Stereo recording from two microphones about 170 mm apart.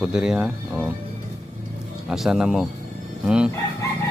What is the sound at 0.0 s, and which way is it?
Speech, 5° right (ahead or behind).